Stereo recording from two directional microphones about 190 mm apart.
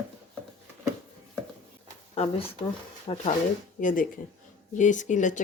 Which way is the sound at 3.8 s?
45° left (ahead or behind).